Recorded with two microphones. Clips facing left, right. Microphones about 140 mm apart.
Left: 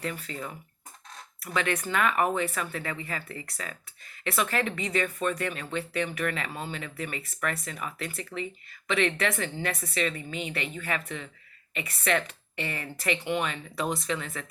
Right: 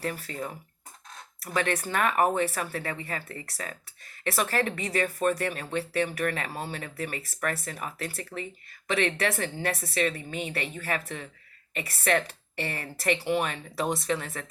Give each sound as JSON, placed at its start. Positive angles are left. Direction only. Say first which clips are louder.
{"t": 0.0, "sound": "speech", "louder": "right 2 dB", "side_deg": -40}
{"t": 1.5, "sound": "speech", "louder": "right 1 dB", "side_deg": -40}